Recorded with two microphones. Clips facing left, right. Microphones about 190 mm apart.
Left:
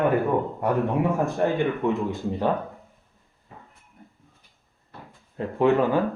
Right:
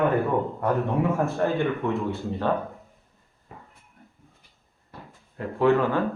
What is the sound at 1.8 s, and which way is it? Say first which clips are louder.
Speech: left 2 dB; 15° left (ahead or behind).